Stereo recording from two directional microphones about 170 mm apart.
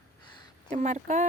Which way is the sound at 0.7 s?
45° right (ahead or behind).